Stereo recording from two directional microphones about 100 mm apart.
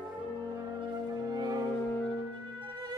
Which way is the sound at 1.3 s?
45° right (ahead or behind).